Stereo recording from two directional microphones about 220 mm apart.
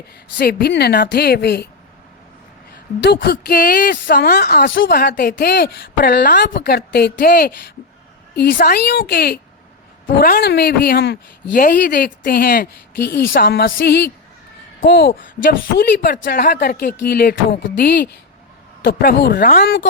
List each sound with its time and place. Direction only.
0.3 s speech: 45° left (ahead or behind)
3.0 s speech: 50° left (ahead or behind)